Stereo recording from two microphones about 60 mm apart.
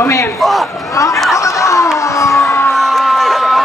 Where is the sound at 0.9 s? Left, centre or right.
Left.